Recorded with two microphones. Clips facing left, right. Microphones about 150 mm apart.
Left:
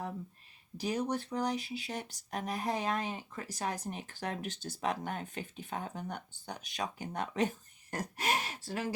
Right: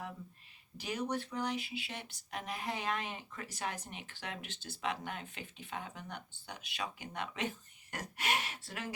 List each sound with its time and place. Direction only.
0.8 s speech: 35° left (ahead or behind)